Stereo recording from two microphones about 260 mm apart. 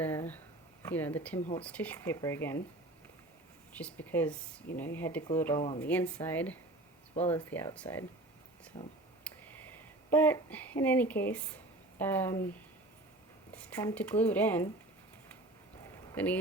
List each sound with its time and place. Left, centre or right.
0.0 s a sound: centre
0.8 s speech: centre
1.4 s speech: left
1.6 s speech: centre
3.7 s speech: centre
7.8 s speech: centre
9.2 s a sound: centre
13.5 s speech: centre
16.1 s speech: centre